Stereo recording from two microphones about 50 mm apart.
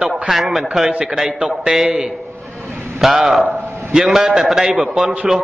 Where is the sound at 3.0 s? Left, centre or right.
Centre.